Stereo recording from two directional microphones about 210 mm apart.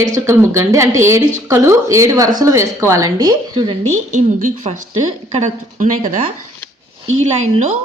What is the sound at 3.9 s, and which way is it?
A woman's voice, 35° right (ahead or behind).